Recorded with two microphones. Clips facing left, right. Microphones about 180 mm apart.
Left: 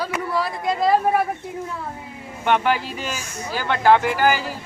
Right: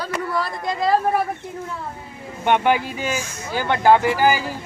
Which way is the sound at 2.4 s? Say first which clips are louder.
Right 2 dB; 15° right (ahead or behind).